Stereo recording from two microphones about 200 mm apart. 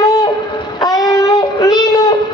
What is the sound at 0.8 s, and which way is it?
Child singing, 20° left (ahead or behind).